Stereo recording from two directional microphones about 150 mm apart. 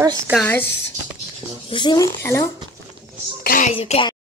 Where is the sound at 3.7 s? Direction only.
40° left (ahead or behind).